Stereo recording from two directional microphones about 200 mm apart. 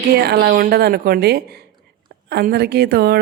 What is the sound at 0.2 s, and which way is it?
A woman's voice, 55° right (ahead or behind).